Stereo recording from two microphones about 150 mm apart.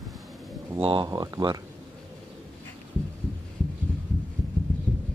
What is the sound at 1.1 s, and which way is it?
Speech, 25° right (ahead or behind).